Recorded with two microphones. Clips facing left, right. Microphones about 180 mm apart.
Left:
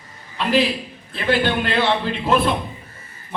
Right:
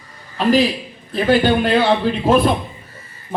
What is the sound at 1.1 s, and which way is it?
A man's voice, 40° right (ahead or behind).